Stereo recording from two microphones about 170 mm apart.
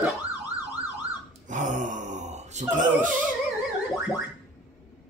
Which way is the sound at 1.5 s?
45° right (ahead or behind).